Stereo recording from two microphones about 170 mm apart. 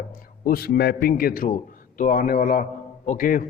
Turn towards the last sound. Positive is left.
turn(degrees=55)  # may be behind; listen again after turning